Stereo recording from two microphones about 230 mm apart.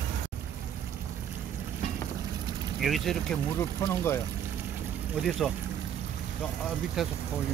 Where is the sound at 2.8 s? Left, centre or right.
Centre.